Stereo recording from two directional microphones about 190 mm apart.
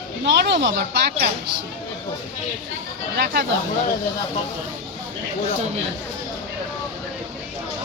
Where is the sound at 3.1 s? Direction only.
60° right (ahead or behind).